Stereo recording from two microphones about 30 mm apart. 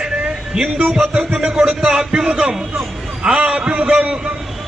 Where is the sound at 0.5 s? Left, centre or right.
Right.